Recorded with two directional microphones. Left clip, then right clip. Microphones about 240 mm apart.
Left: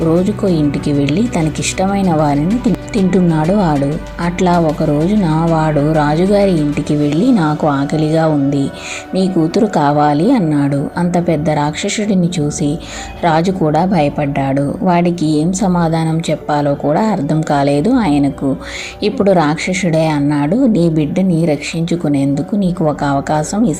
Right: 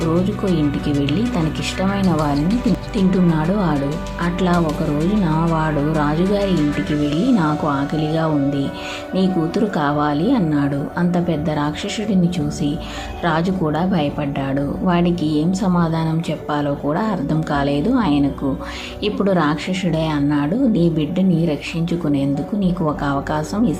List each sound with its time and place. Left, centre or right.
0.1 s a woman's voice: centre
6.4 s speech: centre
7.1 s a woman's voice: centre
13.2 s a woman's voice: centre